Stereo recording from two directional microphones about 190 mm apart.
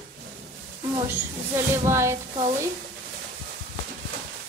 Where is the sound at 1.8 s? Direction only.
15° right (ahead or behind).